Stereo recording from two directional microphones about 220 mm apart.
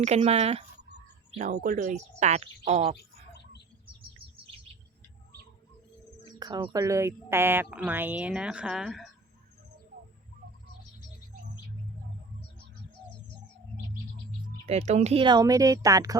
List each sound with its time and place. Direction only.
0.0 s speech: 30° right (ahead or behind)
6.4 s a woman's voice: 20° right (ahead or behind); by 9.0 s 5° right (ahead or behind)
14.7 s a woman's voice: 30° right (ahead or behind)